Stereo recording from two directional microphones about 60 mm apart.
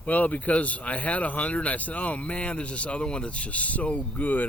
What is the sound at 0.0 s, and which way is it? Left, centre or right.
Speech, left.